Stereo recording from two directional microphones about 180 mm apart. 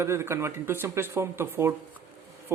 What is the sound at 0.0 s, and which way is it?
Speech, 15° right (ahead or behind).